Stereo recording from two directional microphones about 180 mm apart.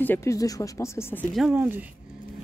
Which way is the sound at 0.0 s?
15° left (ahead or behind).